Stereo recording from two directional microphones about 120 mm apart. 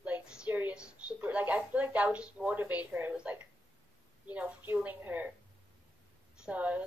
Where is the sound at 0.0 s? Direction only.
10° right (ahead or behind).